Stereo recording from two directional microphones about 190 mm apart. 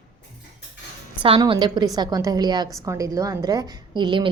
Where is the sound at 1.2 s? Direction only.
30° right (ahead or behind).